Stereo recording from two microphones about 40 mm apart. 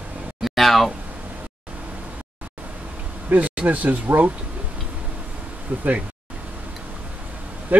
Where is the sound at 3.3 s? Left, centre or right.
Right.